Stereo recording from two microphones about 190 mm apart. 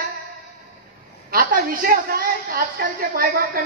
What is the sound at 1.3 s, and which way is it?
A woman's voice, 50° right (ahead or behind).